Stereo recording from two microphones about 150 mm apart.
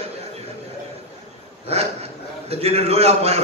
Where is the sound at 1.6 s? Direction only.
45° right (ahead or behind).